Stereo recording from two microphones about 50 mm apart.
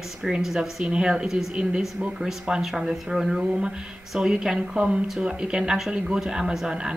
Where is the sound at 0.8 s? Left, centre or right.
Centre.